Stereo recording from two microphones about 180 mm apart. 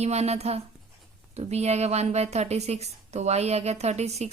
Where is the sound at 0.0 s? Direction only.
35° right (ahead or behind).